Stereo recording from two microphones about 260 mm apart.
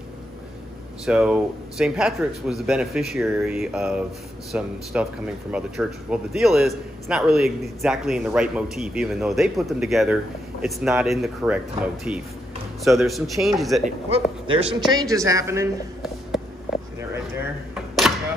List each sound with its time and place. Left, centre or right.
1.0 s a man's voice: centre
13.8 s speech: right